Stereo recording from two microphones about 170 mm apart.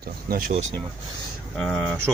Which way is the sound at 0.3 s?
55° right (ahead or behind).